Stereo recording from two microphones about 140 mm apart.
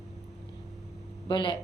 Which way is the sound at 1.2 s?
35° left (ahead or behind).